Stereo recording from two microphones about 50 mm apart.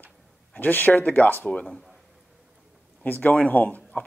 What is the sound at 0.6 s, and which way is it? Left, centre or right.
A man's voice, left.